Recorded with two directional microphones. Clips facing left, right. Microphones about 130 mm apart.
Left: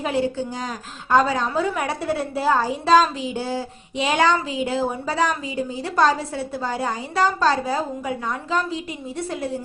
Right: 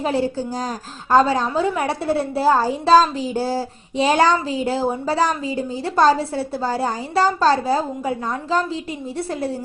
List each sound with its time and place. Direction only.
0.0 s a woman's voice: 35° right (ahead or behind)